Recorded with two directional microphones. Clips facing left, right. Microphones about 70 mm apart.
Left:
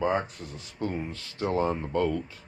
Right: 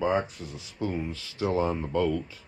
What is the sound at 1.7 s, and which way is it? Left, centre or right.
Speech, left.